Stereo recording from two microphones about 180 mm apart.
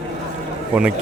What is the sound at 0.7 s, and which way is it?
Speech, 5° right (ahead or behind).